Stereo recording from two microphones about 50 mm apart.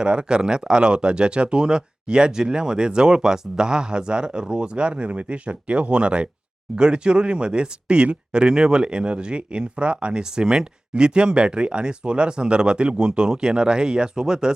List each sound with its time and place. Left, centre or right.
0.0 s speech: centre